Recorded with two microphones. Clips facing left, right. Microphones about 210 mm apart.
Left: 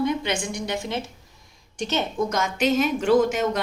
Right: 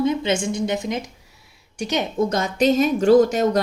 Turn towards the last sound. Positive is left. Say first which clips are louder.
# right 5 dB
turn(degrees=-35)  # may be behind; listen again after turning